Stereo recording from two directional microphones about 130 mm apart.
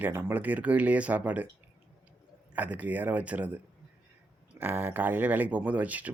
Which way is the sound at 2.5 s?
10° right (ahead or behind).